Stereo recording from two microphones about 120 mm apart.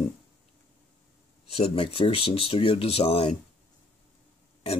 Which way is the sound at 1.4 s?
55° left (ahead or behind).